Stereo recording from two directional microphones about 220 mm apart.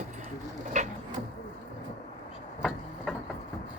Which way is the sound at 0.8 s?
30° right (ahead or behind).